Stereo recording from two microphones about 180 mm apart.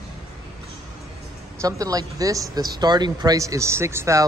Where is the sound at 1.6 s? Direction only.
20° right (ahead or behind).